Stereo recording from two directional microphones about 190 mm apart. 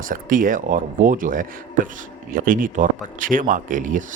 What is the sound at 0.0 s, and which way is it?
Speech, 45° right (ahead or behind).